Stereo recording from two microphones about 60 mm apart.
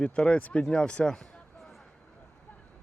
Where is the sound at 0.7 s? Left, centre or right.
Centre.